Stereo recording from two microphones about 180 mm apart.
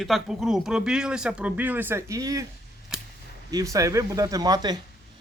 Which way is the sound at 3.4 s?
20° right (ahead or behind).